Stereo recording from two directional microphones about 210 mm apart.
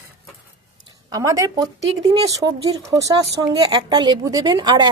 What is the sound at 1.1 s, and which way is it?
A woman's voice, 15° right (ahead or behind).